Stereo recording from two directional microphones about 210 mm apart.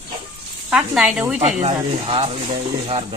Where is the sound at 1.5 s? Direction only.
35° right (ahead or behind).